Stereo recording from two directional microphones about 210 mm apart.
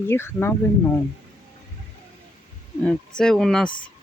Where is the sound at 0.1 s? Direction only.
10° left (ahead or behind).